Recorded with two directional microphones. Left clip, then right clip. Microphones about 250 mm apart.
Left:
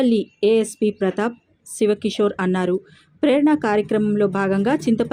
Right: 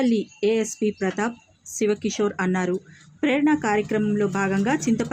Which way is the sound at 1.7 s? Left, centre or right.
Centre.